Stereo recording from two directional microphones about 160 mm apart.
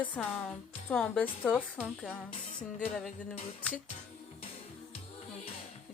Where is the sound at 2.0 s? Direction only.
5° left (ahead or behind).